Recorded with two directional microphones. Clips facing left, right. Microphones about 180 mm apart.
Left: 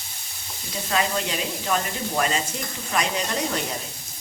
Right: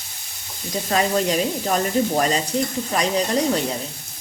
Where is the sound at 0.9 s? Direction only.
40° right (ahead or behind).